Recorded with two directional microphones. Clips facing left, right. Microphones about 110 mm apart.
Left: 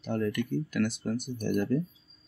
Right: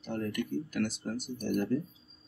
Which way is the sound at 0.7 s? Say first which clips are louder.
Left 4 dB; 90° left.